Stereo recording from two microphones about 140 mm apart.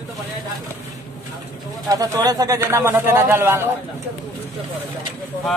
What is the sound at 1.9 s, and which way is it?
Speech, 25° right (ahead or behind).